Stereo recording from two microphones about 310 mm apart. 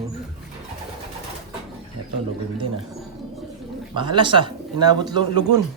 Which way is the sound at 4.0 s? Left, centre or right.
Centre.